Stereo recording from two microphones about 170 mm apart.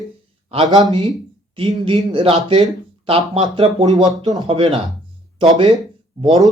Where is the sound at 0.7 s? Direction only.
25° right (ahead or behind).